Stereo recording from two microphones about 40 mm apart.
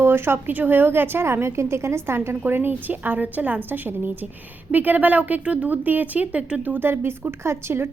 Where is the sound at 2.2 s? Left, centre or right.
Right.